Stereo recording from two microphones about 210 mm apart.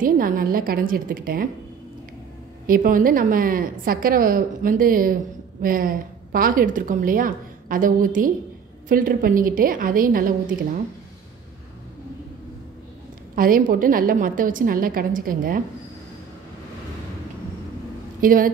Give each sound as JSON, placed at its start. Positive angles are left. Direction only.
{"t": 0.0, "sound": "a woman's voice", "side_deg": -40}
{"t": 2.6, "sound": "a woman's voice", "side_deg": -40}
{"t": 13.3, "sound": "a woman's voice", "side_deg": -40}
{"t": 18.2, "sound": "a woman's voice", "side_deg": -40}